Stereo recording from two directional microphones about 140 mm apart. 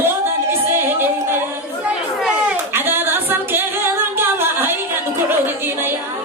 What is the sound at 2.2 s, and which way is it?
Singing, 10° right (ahead or behind).